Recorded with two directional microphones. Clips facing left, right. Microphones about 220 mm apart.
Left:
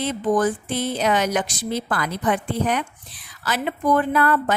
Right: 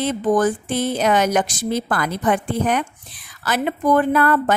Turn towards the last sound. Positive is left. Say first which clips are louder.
# right 3 dB
turn(degrees=-50)  # may be behind; listen again after turning